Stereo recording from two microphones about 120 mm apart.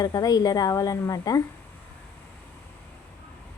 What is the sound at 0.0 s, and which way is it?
A woman's voice, 30° left (ahead or behind).